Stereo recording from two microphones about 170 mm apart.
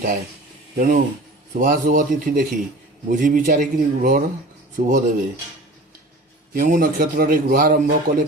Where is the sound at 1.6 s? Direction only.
50° right (ahead or behind).